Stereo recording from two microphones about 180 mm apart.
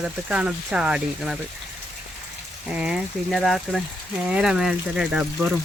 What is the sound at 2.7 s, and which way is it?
Speech, 5° right (ahead or behind).